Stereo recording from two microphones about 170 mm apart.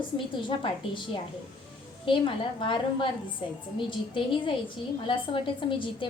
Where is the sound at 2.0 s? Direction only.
30° left (ahead or behind).